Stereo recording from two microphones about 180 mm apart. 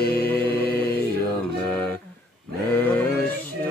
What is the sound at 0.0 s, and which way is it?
Music, 10° left (ahead or behind).